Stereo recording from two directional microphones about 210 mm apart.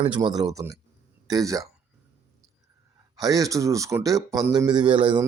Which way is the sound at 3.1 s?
15° right (ahead or behind).